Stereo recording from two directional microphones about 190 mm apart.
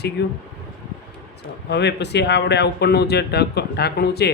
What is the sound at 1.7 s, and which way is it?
A man's voice, 65° left (ahead or behind).